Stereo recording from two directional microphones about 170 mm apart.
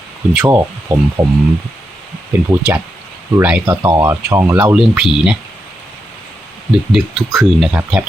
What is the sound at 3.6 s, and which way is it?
Speech, 20° right (ahead or behind).